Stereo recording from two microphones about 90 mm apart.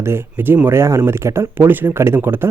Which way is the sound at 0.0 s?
25° right (ahead or behind).